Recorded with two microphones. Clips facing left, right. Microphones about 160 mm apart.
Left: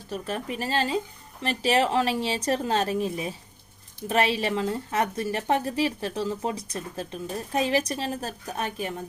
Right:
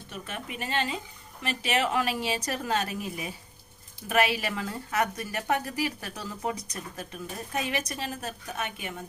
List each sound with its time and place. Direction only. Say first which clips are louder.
0.1 s a woman's voice: left 8 dB; 35° left (ahead or behind)